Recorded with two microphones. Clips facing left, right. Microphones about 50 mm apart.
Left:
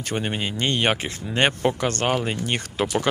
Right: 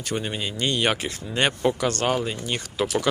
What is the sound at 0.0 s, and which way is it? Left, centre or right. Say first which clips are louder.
Speech: left 2 dB; left.